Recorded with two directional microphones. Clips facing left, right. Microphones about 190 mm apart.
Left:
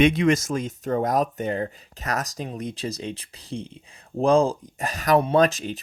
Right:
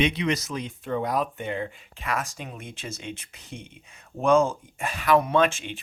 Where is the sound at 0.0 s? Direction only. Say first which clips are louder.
Left 6 dB; 45° left (ahead or behind).